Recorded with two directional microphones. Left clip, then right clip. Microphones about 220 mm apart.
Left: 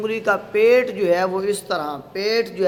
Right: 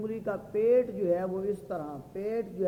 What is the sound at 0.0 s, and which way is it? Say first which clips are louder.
A man's voice: left 13 dB; 15° left (ahead or behind).